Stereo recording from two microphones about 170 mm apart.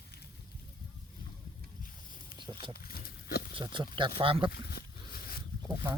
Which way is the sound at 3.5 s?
30° right (ahead or behind).